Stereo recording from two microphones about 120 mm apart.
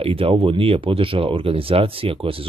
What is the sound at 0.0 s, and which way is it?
Speech, 50° right (ahead or behind).